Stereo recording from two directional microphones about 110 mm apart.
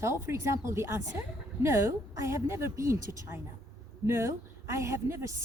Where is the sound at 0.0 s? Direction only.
25° right (ahead or behind).